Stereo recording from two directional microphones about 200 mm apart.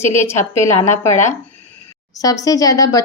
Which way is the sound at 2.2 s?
15° left (ahead or behind).